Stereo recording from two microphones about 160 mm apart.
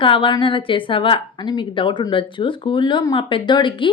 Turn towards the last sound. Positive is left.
turn(degrees=30)  # may be behind; listen again after turning